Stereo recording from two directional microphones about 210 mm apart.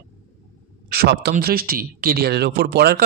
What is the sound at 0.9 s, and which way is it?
Speech, 50° right (ahead or behind).